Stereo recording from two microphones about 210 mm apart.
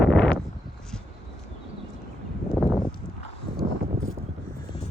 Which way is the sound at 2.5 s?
5° left (ahead or behind).